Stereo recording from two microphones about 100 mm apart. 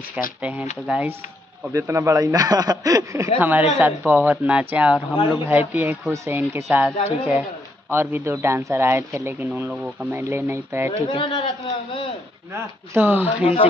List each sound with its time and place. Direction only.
0.1 s speech: 15° right (ahead or behind)
1.7 s speech: 30° right (ahead or behind)
3.3 s speech: 15° right (ahead or behind)
9.5 s speech: 15° right (ahead or behind)
10.2 s speech: 25° right (ahead or behind)
11.1 s a man's voice: 55° left (ahead or behind)
12.5 s speech: 20° right (ahead or behind)